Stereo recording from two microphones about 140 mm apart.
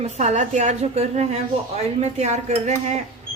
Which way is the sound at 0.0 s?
55° right (ahead or behind).